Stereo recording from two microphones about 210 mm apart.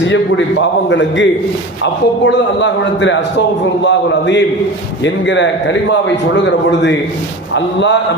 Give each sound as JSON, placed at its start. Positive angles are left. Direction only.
{"t": 0.0, "sound": "a man's voice", "side_deg": 60}